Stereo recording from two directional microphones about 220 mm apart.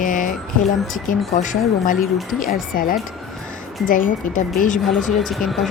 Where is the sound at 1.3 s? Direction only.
35° left (ahead or behind).